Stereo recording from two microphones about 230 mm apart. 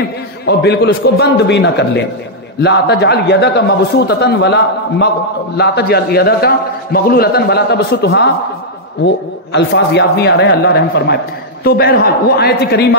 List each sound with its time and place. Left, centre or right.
0.5 s a man's voice: left